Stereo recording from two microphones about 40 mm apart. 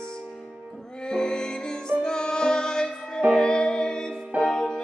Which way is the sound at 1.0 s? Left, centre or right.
Centre.